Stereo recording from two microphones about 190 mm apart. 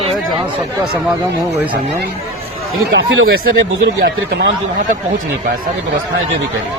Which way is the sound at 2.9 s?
90° right.